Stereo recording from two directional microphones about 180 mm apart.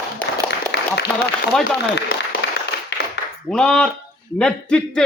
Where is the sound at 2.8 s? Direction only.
70° left (ahead or behind).